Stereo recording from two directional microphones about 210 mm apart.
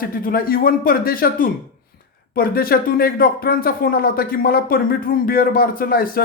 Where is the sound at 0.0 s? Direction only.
45° left (ahead or behind).